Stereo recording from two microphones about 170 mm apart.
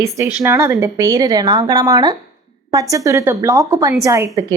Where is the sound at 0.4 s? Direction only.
15° right (ahead or behind).